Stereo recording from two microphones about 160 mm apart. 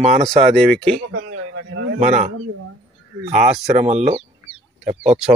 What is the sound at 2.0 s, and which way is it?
Speech, 45° right (ahead or behind).